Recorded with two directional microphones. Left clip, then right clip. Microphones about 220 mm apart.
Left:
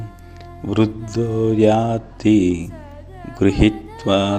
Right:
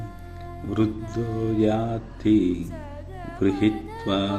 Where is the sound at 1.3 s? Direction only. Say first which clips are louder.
Left 9 dB; centre (ahead or behind).